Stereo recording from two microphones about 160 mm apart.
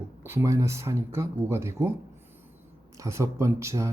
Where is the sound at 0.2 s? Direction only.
15° right (ahead or behind).